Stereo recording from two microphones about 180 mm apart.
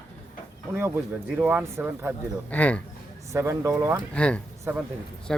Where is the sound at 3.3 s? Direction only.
15° right (ahead or behind).